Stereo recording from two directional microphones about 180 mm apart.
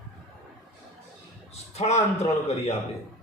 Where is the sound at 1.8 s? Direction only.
35° left (ahead or behind).